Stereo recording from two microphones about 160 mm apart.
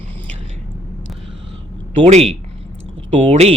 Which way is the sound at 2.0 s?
45° right (ahead or behind).